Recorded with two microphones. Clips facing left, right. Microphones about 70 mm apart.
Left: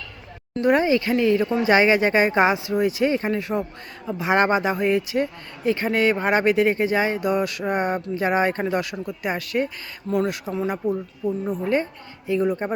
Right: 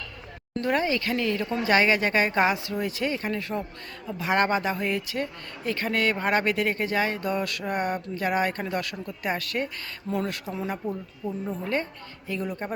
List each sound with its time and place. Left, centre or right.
0.6 s speech: centre